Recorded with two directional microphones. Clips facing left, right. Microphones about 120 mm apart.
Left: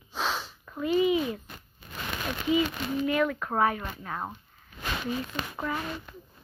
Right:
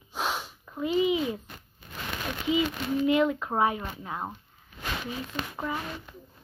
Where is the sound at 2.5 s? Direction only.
20° right (ahead or behind).